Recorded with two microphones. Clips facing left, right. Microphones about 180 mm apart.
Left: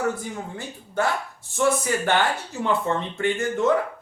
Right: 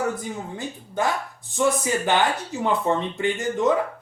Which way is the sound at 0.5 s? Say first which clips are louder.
Left 1 dB; 15° right (ahead or behind).